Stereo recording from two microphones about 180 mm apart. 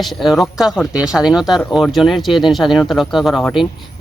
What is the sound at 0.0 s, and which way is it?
Speech, centre (ahead or behind).